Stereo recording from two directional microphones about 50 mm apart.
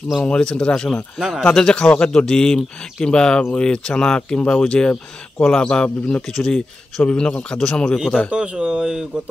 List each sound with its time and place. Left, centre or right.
0.2 s speech: centre
7.0 s a man's voice: left
8.3 s speech: right